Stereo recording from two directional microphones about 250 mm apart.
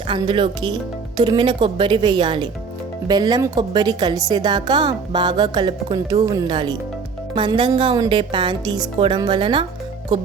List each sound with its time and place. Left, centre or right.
0.1 s a woman's voice: centre